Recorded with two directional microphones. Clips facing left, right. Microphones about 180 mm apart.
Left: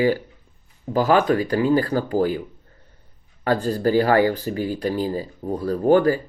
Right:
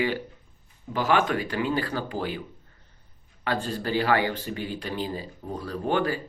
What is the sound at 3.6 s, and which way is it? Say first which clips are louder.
Speech: left 8 dB; 40° left (ahead or behind).